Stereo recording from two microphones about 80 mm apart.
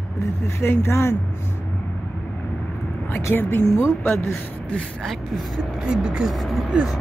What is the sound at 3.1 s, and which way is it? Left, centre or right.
Speech, left.